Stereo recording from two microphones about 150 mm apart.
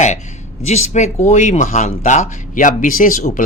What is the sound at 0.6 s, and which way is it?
Speech, 50° left (ahead or behind).